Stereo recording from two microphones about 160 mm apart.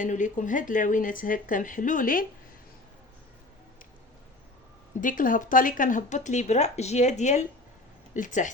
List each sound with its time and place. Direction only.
0.0 s speech: 50° left (ahead or behind)
4.9 s speech: 55° left (ahead or behind)